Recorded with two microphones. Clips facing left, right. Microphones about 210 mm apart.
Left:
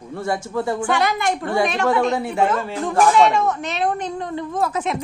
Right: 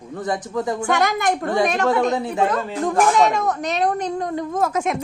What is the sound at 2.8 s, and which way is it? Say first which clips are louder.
Speech: left 1 dB; 45° right (ahead or behind).